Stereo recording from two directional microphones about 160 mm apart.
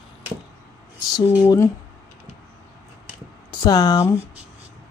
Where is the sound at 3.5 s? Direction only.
25° left (ahead or behind).